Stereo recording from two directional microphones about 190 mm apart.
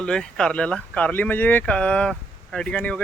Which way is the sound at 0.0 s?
5° left (ahead or behind).